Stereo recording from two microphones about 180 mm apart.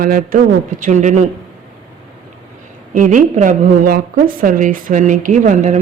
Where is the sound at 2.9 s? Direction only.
45° right (ahead or behind).